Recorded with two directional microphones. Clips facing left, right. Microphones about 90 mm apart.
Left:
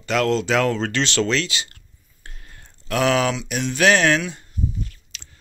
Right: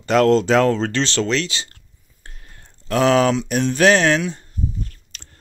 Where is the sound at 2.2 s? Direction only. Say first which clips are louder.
Even; 25° right (ahead or behind).